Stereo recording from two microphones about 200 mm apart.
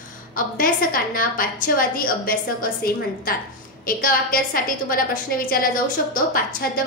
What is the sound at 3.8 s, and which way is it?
A woman's voice, 45° left (ahead or behind).